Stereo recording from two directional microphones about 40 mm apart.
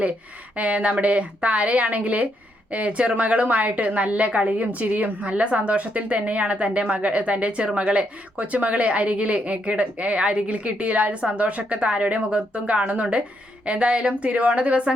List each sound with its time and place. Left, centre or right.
0.5 s a woman's voice: right